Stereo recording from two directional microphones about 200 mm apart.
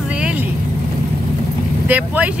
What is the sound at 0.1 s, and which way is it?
Vehicle, 5° right (ahead or behind).